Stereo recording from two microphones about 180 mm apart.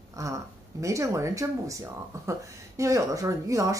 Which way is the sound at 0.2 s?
20° right (ahead or behind).